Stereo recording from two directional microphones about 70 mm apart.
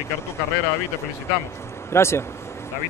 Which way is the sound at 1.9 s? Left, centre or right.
Left.